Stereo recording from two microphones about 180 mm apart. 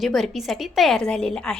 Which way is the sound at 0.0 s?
Centre (ahead or behind).